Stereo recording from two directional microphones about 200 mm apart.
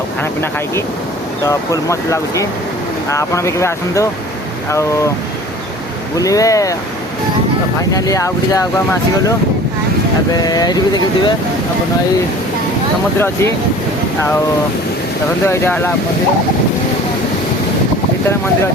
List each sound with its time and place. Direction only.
1.5 s speech: 15° left (ahead or behind)
6.1 s speech: 15° left (ahead or behind)
7.9 s speech: 15° left (ahead or behind)
10.4 s speech: 20° left (ahead or behind)
13.1 s speech: 10° left (ahead or behind)
15.4 s speech: 10° left (ahead or behind)